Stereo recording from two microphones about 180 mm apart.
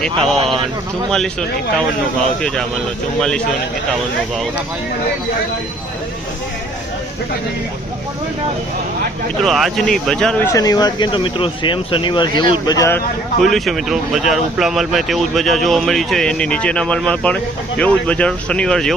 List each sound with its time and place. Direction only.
0.0 s speech: centre (ahead or behind)
3.2 s speech: 5° left (ahead or behind)
9.4 s speech: centre (ahead or behind); by 13.0 s 20° left (ahead or behind)
13.4 s speech: centre (ahead or behind)